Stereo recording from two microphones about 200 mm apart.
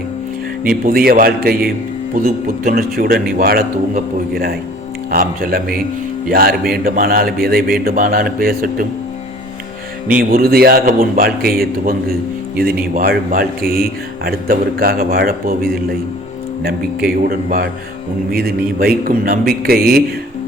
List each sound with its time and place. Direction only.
0.9 s a man's voice: 45° right (ahead or behind)
10.2 s a man's voice: 50° right (ahead or behind)